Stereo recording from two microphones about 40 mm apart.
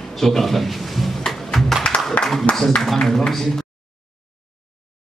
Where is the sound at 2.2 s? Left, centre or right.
Left.